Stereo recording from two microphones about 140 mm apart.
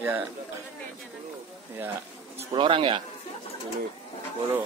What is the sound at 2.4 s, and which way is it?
Speech, 40° right (ahead or behind).